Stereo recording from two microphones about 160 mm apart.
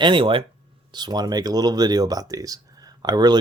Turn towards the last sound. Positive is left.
turn(degrees=-25)  # may be behind; listen again after turning